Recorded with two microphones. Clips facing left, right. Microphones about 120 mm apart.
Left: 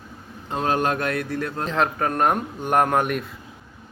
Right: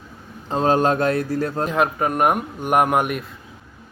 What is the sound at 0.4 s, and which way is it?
Speech, 30° right (ahead or behind).